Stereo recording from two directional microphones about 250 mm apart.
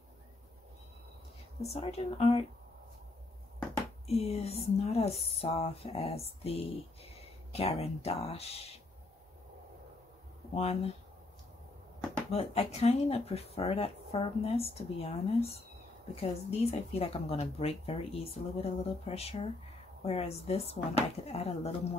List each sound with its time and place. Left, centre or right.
1.6 s speech: left
4.1 s speech: left
10.5 s speech: left
12.3 s speech: left